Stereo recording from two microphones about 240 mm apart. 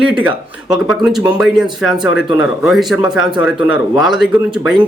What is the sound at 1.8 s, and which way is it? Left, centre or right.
Speech, centre.